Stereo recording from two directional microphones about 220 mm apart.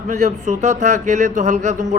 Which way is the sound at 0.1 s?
30° right (ahead or behind).